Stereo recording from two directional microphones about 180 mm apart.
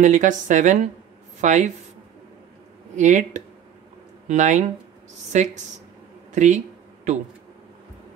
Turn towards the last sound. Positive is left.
turn(degrees=-40)  # may be behind; listen again after turning